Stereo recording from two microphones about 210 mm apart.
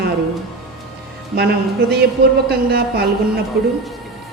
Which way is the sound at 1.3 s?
50° right (ahead or behind).